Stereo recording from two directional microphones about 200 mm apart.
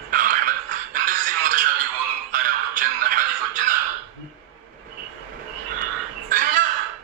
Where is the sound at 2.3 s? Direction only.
45° right (ahead or behind).